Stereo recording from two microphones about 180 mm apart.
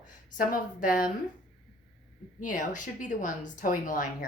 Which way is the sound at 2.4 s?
45° left (ahead or behind).